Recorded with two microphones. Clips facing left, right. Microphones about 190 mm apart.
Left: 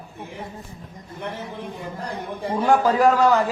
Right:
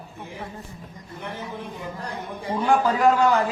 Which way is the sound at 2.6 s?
40° left (ahead or behind).